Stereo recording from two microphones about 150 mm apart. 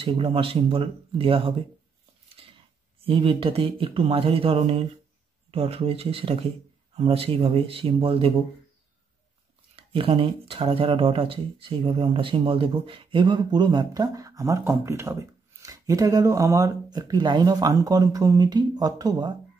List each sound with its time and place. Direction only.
0.0 s speech: 35° right (ahead or behind)
2.4 s a sound: 35° right (ahead or behind)
3.0 s speech: 35° right (ahead or behind)
9.8 s speech: 35° right (ahead or behind)